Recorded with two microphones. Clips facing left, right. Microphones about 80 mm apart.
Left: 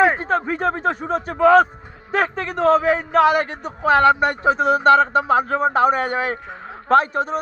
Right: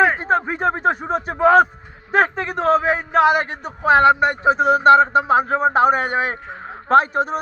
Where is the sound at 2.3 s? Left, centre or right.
Centre.